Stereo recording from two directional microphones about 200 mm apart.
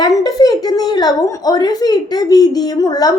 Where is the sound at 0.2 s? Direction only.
20° left (ahead or behind).